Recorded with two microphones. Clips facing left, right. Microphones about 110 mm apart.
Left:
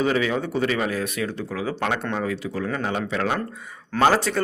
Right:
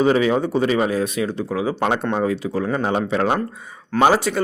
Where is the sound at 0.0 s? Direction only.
30° right (ahead or behind).